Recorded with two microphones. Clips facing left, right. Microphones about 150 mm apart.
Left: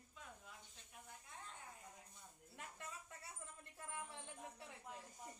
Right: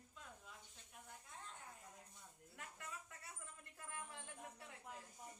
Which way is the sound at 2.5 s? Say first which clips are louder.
Left 1 dB; 25° left (ahead or behind).